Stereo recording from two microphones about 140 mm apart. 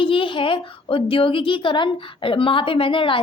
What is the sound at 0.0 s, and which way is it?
Speech, 40° left (ahead or behind).